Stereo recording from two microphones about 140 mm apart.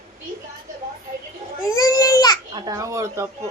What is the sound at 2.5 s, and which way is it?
Speech, 25° right (ahead or behind).